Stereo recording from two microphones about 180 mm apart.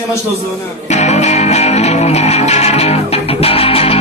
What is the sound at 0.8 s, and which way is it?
Music, 40° left (ahead or behind).